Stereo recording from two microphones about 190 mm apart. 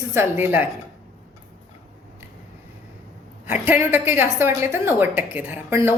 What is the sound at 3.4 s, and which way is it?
A woman's voice, 10° right (ahead or behind).